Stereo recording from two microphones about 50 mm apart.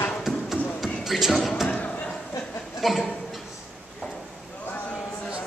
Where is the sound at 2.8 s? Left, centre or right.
Centre.